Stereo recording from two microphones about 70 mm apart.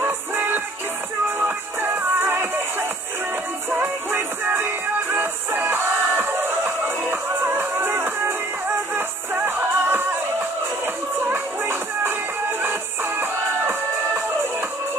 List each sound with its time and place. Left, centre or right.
0.0 s music: right
3.7 s music: right
11.2 s music: right
13.2 s music: right